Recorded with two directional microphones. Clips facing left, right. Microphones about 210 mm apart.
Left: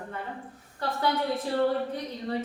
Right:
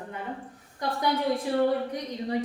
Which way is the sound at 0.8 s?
15° right (ahead or behind).